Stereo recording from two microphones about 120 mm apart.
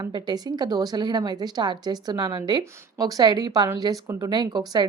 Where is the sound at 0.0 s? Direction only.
35° right (ahead or behind).